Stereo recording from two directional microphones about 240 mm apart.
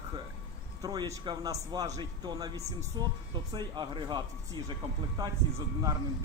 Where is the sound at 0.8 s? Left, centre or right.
Centre.